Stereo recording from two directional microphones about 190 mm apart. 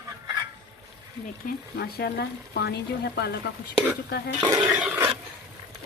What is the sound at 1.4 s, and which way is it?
Speech, 55° left (ahead or behind).